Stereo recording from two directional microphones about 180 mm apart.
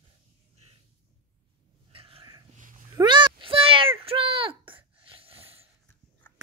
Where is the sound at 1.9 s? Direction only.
30° right (ahead or behind).